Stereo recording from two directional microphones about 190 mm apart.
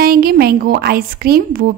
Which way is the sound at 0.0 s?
55° right (ahead or behind).